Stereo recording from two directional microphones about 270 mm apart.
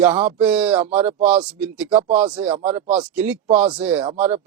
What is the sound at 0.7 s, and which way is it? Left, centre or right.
Speech, right.